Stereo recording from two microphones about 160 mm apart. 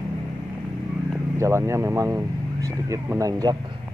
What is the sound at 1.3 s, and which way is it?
Speech, 15° right (ahead or behind).